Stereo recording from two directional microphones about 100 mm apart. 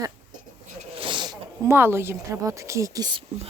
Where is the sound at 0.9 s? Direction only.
55° right (ahead or behind).